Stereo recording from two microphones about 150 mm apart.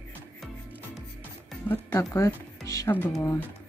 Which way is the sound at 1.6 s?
15° left (ahead or behind).